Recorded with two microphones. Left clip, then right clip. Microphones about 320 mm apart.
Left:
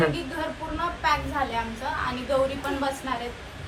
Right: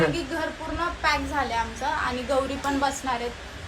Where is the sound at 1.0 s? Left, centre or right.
Centre.